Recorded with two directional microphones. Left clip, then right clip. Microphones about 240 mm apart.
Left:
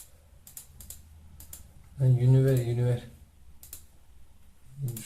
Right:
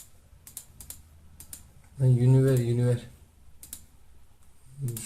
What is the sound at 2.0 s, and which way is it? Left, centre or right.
Speech, centre.